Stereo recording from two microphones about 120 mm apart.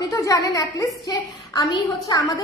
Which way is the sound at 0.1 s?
25° left (ahead or behind).